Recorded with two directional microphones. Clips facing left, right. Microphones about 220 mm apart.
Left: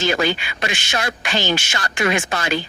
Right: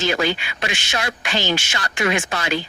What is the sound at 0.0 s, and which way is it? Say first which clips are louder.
Speech: left 1 dB; 45° left (ahead or behind).